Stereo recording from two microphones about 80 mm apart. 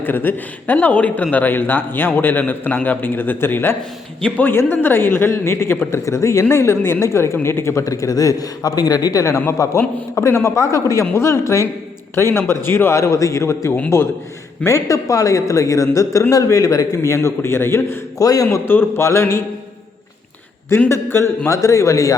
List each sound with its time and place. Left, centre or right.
0.0 s a man's voice: left
18.2 s a man's voice: left
18.5 s a man's voice: left
20.7 s a man's voice: left